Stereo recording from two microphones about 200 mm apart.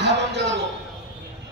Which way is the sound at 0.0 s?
60° right (ahead or behind).